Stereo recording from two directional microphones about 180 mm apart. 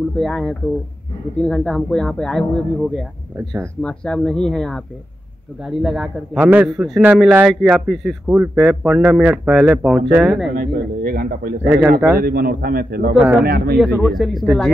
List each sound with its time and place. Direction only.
0.2 s a man's voice: centre (ahead or behind)
10.5 s speech: 50° right (ahead or behind)
11.6 s speech: 5° right (ahead or behind)
12.2 s a man's voice: 55° right (ahead or behind)
13.7 s a man's voice: 5° right (ahead or behind)